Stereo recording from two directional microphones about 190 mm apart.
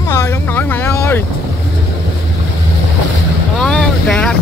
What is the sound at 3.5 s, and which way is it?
Boat, 5° left (ahead or behind).